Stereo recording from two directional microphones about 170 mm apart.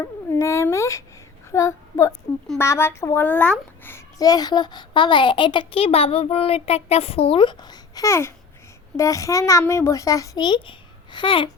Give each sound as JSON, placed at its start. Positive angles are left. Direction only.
{"t": 0.0, "sound": "dog", "side_deg": 15}
{"t": 1.5, "sound": "a child's voice", "side_deg": 15}